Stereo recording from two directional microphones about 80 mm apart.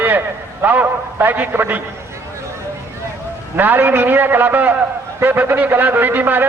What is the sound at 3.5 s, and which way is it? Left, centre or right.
A man's voice, right.